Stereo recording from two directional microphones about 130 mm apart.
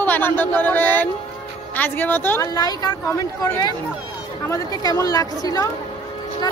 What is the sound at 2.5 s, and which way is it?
Speech, 30° left (ahead or behind).